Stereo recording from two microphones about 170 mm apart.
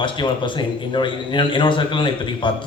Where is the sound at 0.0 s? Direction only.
30° left (ahead or behind).